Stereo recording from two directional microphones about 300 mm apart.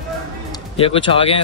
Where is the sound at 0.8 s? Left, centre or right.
Centre.